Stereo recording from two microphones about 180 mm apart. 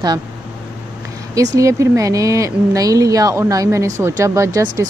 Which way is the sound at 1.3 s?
20° right (ahead or behind).